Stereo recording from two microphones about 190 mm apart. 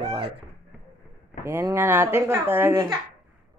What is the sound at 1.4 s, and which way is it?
Speech, 15° right (ahead or behind).